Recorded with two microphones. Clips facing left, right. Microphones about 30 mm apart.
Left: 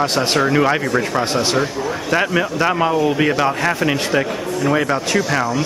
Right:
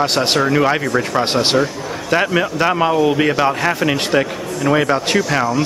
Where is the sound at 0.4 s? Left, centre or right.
Centre.